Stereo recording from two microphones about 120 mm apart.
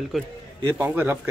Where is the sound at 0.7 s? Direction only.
15° right (ahead or behind).